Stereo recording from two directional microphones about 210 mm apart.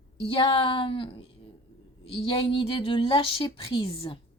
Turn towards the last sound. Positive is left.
turn(degrees=25)  # may be behind; listen again after turning